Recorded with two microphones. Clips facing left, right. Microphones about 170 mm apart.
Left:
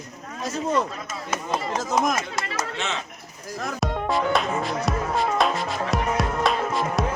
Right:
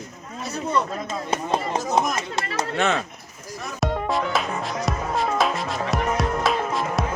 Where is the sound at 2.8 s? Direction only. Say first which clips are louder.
Right 7 dB; 55° right (ahead or behind).